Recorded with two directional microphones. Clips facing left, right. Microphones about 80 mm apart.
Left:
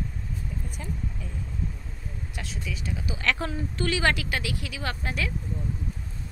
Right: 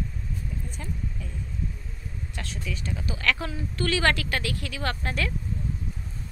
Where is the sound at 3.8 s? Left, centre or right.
Centre.